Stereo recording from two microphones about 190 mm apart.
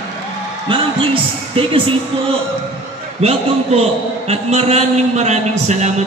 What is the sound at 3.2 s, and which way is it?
A man's voice, 35° right (ahead or behind).